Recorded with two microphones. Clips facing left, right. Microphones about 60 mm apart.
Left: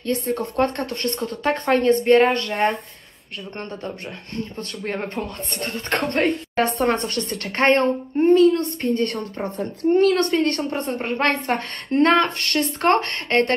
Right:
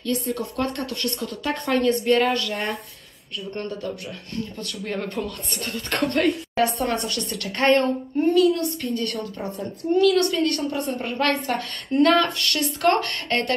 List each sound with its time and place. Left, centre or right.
0.0 s a woman's voice: left